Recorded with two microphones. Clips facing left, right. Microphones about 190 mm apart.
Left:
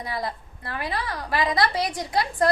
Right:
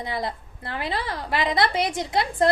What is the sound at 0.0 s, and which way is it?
A woman's voice, 25° right (ahead or behind).